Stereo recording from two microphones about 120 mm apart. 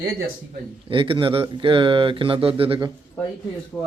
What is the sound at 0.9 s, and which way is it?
Speech, 45° right (ahead or behind).